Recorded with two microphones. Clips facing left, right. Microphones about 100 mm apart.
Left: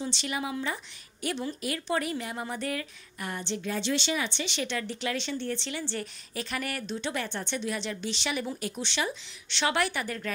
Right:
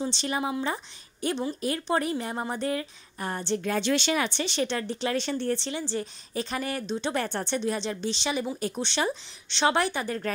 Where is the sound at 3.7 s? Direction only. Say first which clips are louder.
Right 3 dB; 55° right (ahead or behind); by 5.7 s 40° right (ahead or behind).